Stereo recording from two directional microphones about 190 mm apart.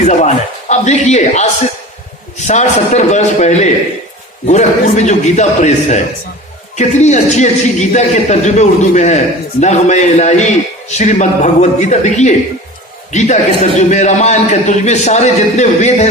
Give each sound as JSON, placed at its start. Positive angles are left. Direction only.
{"t": 0.7, "sound": "a man's voice", "side_deg": 35}